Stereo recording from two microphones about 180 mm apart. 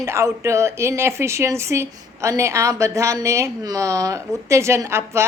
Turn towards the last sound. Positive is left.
turn(degrees=-15)  # may be behind; listen again after turning